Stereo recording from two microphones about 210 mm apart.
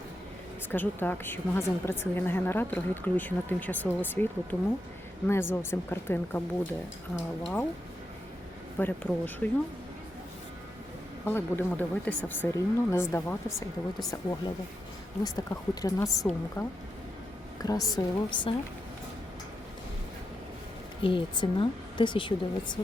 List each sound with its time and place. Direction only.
0.7 s a woman's voice: 10° left (ahead or behind)
7.4 s speech: 5° left (ahead or behind)
8.8 s a woman's voice: 10° left (ahead or behind)
11.3 s a woman's voice: 10° left (ahead or behind)
21.0 s speech: 25° left (ahead or behind)